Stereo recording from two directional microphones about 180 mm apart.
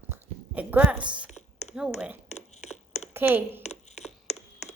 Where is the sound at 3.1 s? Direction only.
10° right (ahead or behind).